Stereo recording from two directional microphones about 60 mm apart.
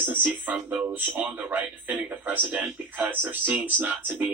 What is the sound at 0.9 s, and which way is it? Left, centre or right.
Speech, right.